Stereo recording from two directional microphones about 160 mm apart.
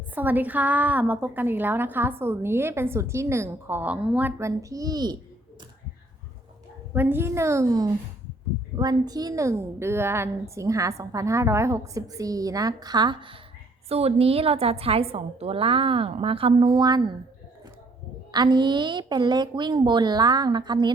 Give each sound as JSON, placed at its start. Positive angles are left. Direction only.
{"t": 0.1, "sound": "a woman's voice", "side_deg": -10}
{"t": 6.9, "sound": "a woman's voice", "side_deg": -15}
{"t": 13.8, "sound": "a woman's voice", "side_deg": -40}
{"t": 18.3, "sound": "a woman's voice", "side_deg": -25}